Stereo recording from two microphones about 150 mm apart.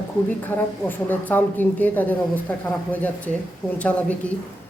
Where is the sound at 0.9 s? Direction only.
10° left (ahead or behind).